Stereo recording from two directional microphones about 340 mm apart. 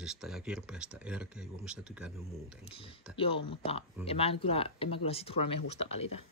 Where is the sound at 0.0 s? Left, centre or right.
Centre.